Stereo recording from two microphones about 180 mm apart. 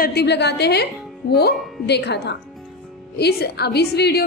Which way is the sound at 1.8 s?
65° left (ahead or behind).